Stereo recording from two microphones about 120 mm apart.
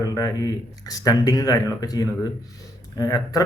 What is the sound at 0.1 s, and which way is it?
A man's voice, 30° left (ahead or behind).